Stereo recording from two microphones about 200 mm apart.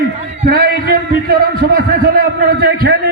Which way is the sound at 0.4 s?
45° right (ahead or behind).